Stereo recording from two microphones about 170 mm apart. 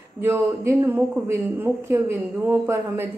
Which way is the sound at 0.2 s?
15° right (ahead or behind).